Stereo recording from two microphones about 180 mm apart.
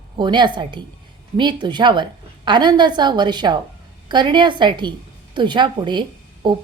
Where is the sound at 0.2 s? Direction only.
25° right (ahead or behind).